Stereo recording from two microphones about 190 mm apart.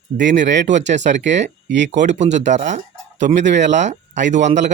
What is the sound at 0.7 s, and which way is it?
Speech, 40° right (ahead or behind).